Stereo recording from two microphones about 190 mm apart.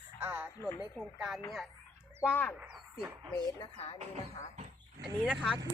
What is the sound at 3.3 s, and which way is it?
Speech, 25° left (ahead or behind).